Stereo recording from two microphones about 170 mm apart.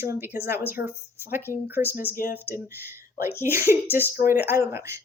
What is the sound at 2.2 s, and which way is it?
Speech, 55° left (ahead or behind).